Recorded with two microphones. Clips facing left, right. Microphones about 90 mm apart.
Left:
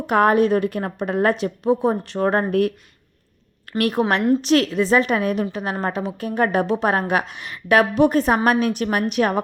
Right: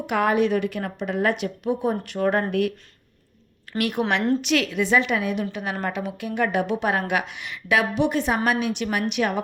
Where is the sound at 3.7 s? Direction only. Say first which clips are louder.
Left 4 dB; 40° left (ahead or behind).